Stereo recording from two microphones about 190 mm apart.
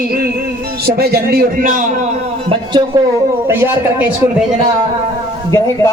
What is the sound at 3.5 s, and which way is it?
Speech, 10° right (ahead or behind).